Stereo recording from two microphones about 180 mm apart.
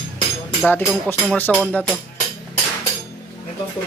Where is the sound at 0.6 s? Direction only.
5° left (ahead or behind).